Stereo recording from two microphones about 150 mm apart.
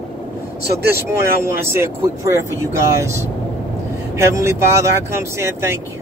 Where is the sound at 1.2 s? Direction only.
15° right (ahead or behind).